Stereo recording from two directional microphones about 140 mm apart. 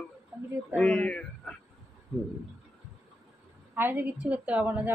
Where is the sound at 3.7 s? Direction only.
15° right (ahead or behind).